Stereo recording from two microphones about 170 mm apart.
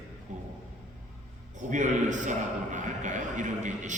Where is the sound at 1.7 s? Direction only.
45° right (ahead or behind).